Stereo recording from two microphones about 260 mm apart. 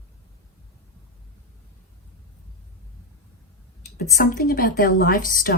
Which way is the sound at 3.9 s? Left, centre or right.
Left.